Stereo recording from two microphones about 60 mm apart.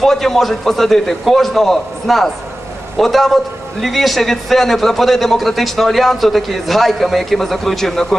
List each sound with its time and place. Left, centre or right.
0.0 s a man's voice: centre